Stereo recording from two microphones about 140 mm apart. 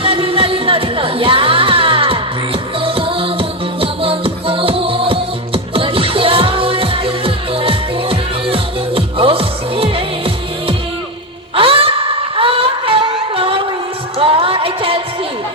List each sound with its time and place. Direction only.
0.0 s music: 40° right (ahead or behind)
11.5 s a sound: 40° right (ahead or behind)
14.2 s music: 40° right (ahead or behind)